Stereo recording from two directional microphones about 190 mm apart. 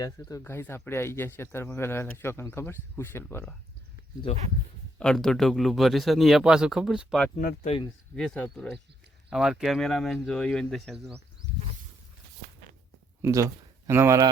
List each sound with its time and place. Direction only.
0.0 s speech: 20° left (ahead or behind)
4.3 s speech: 35° left (ahead or behind)
4.9 s speech: 5° left (ahead or behind)
7.3 s speech: 40° left (ahead or behind)
8.1 s speech: 5° left (ahead or behind)
13.2 s speech: 15° right (ahead or behind)